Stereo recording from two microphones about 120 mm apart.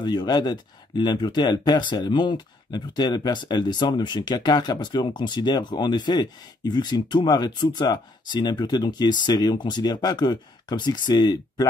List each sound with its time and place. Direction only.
0.0 s speech: 35° left (ahead or behind)